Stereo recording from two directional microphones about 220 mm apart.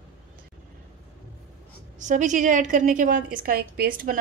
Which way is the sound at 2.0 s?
35° right (ahead or behind).